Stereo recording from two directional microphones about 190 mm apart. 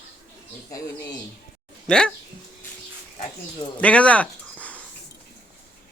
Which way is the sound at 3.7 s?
5° left (ahead or behind).